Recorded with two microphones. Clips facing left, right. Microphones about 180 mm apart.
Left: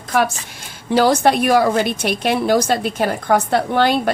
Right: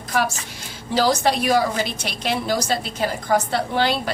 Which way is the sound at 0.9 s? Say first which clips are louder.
Left 5 dB; 55° left (ahead or behind).